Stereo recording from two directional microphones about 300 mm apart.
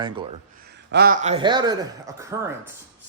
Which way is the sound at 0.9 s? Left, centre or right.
Right.